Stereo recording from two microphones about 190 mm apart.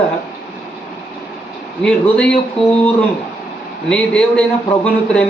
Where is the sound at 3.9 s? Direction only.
5° left (ahead or behind).